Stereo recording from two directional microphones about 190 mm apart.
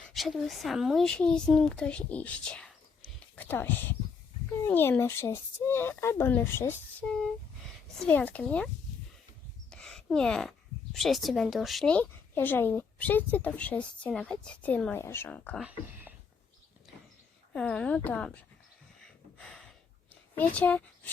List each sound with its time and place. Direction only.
0.1 s a woman's voice: centre (ahead or behind)
9.7 s a sound: centre (ahead or behind)
10.9 s a woman's voice: centre (ahead or behind)
15.6 s speech: 10° right (ahead or behind)
17.5 s a woman's voice: 5° left (ahead or behind)
19.0 s a sound: 5° left (ahead or behind)
20.3 s speech: 10° left (ahead or behind)